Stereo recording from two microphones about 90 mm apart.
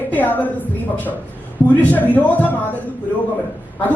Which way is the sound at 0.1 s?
20° left (ahead or behind).